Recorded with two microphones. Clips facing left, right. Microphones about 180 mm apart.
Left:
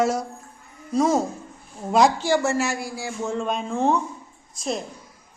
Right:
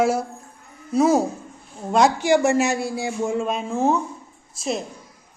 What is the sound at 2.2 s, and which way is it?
Speech, 15° right (ahead or behind).